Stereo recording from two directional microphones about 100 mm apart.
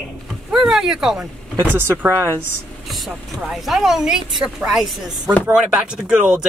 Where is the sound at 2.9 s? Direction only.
Centre (ahead or behind).